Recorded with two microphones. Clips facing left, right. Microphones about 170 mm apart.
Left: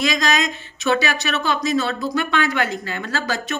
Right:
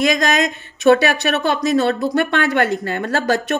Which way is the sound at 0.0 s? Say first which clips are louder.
Right 4 dB; 55° right (ahead or behind).